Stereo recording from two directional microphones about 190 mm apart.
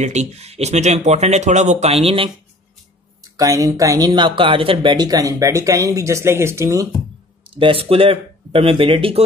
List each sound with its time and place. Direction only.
0.0 s speech: 35° right (ahead or behind)
3.3 s speech: 15° right (ahead or behind)
7.4 s speech: 30° right (ahead or behind)